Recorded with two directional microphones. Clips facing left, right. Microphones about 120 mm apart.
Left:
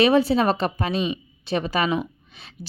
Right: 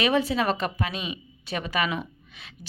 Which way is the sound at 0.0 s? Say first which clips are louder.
Left 6 dB; 30° left (ahead or behind).